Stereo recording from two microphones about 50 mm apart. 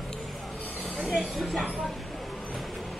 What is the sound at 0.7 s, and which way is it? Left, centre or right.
Speech, centre.